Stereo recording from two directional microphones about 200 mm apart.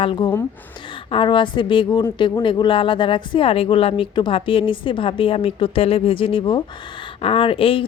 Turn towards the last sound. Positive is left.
turn(degrees=30)  # may be behind; listen again after turning